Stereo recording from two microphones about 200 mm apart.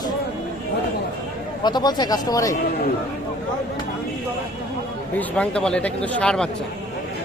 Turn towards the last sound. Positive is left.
turn(degrees=5)  # may be behind; listen again after turning